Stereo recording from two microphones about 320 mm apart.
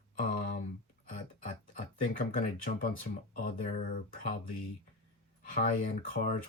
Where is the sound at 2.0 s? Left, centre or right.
Left.